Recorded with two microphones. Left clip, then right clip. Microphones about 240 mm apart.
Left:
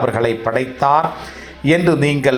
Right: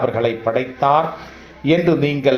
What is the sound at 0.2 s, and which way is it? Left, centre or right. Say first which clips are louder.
A man's voice: left 1 dB; left.